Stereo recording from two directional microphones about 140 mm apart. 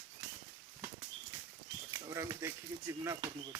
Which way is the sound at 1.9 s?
20° right (ahead or behind).